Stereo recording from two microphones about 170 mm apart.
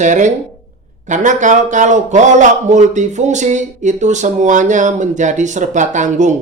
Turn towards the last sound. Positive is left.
turn(degrees=-45)  # may be behind; listen again after turning